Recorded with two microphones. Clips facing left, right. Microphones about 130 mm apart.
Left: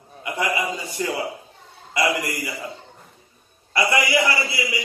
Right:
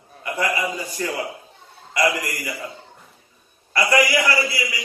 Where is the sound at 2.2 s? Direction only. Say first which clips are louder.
Left 2 dB; 25° left (ahead or behind).